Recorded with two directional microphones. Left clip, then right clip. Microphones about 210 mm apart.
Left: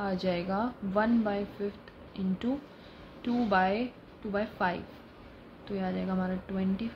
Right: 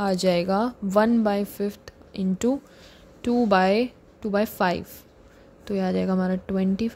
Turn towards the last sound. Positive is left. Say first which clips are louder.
# right 8 dB
turn(degrees=-55)  # may be behind; listen again after turning